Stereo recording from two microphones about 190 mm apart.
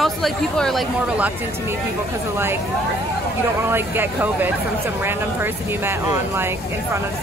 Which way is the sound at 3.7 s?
10° right (ahead or behind).